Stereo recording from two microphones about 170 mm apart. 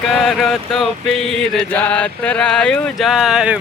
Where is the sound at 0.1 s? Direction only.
Centre (ahead or behind).